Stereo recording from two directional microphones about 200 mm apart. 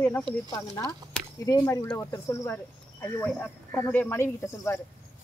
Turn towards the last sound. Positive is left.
turn(degrees=15)  # may be behind; listen again after turning